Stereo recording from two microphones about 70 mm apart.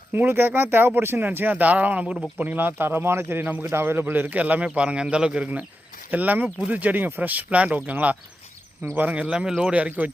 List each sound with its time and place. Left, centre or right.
0.1 s a man's voice: right